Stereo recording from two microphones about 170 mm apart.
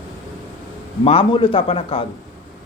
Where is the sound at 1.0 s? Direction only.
35° left (ahead or behind).